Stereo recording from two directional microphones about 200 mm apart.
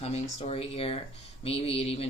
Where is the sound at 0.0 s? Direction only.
30° left (ahead or behind).